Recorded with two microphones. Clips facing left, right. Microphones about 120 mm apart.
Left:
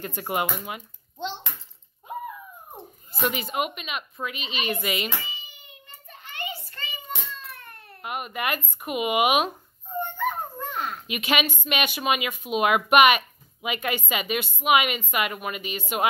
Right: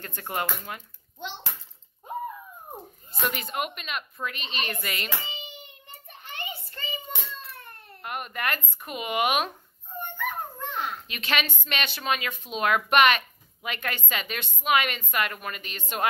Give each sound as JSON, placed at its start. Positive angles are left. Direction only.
{"t": 0.0, "sound": "a woman's voice", "side_deg": 10}
{"t": 3.2, "sound": "a woman's voice", "side_deg": 0}
{"t": 6.3, "sound": "child singing", "side_deg": -20}
{"t": 8.0, "sound": "a woman's voice", "side_deg": 5}
{"t": 9.9, "sound": "dog", "side_deg": 15}
{"t": 10.7, "sound": "babbling", "side_deg": 0}
{"t": 11.1, "sound": "a woman's voice", "side_deg": 10}